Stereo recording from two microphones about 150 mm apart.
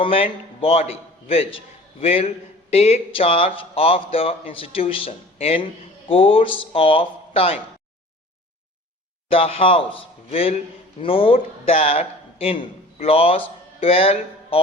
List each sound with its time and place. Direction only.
0.0 s a man's voice: 40° left (ahead or behind)
9.3 s a man's voice: 40° left (ahead or behind)
13.7 s music: 40° left (ahead or behind)